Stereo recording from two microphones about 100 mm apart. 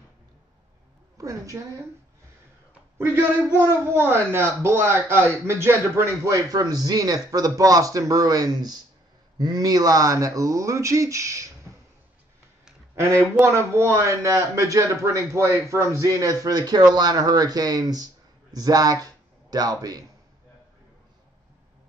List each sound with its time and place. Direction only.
1.1 s a woman's voice: 35° right (ahead or behind)
3.0 s a man's voice: 20° right (ahead or behind)
6.5 s speech: 40° right (ahead or behind)
11.7 s a sound: 25° right (ahead or behind)
12.9 s a man's voice: 30° right (ahead or behind)